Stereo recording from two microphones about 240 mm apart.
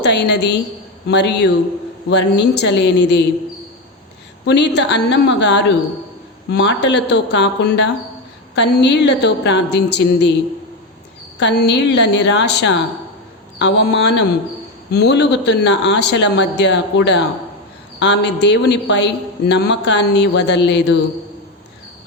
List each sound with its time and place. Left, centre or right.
0.0 s a man's voice: left
4.4 s a man's voice: left
11.3 s a man's voice: left